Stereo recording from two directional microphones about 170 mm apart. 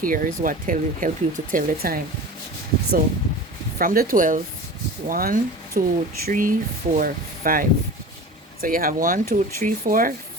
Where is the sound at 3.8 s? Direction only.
55° right (ahead or behind).